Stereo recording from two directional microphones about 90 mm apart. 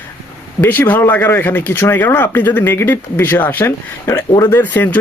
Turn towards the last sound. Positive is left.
turn(degrees=20)  # may be behind; listen again after turning